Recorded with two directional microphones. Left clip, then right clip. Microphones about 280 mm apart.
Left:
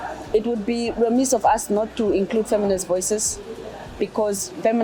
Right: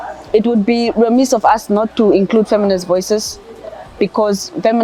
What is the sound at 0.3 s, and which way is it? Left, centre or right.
A woman's voice, right.